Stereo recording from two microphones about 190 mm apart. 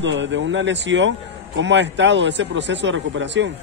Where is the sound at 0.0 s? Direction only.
75° right (ahead or behind).